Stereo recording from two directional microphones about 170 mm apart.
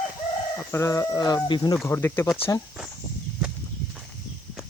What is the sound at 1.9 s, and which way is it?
Speech, 10° left (ahead or behind).